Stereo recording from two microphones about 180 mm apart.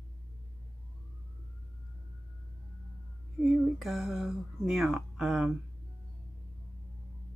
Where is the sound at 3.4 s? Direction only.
Centre (ahead or behind).